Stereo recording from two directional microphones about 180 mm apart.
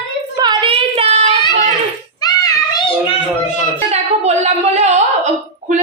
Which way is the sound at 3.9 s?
40° right (ahead or behind).